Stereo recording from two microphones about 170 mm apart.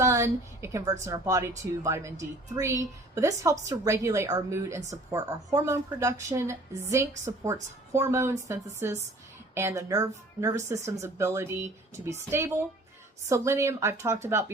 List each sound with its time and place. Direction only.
0.0 s a woman's voice: 15° right (ahead or behind)